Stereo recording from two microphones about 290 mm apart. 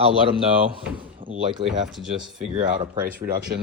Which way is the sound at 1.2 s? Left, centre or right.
Centre.